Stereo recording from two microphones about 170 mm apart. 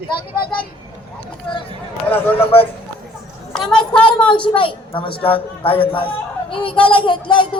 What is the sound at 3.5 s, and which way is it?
Speech, 5° left (ahead or behind).